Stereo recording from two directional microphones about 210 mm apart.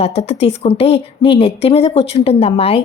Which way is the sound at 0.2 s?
30° left (ahead or behind).